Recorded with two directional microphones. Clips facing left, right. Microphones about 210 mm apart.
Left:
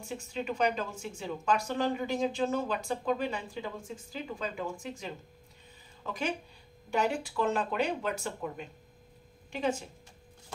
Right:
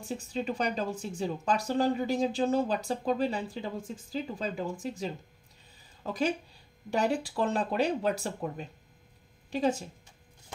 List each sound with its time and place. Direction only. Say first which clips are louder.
0.1 s speech: right 3 dB; 35° right (ahead or behind)